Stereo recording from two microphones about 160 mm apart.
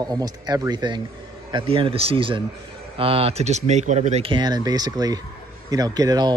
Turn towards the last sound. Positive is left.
turn(degrees=-25)  # may be behind; listen again after turning